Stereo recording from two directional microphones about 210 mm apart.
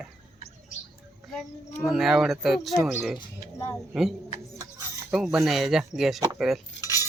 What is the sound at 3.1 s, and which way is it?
Speech, 15° left (ahead or behind).